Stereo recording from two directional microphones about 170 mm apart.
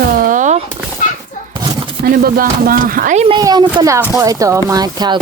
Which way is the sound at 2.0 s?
60° right (ahead or behind).